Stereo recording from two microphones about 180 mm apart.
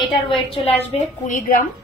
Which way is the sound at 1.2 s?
45° left (ahead or behind).